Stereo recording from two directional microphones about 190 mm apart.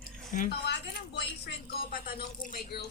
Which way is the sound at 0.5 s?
60° left (ahead or behind).